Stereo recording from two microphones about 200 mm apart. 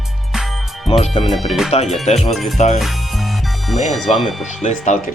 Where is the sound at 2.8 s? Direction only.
Centre (ahead or behind).